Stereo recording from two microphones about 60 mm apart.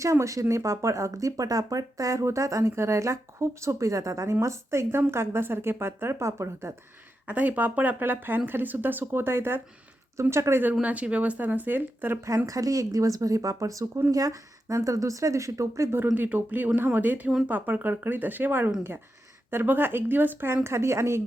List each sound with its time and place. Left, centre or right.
0.0 s speech: right
7.3 s speech: right
10.2 s speech: right
10.8 s speech: right
12.5 s speech: right
16.1 s speech: right
20.7 s speech: right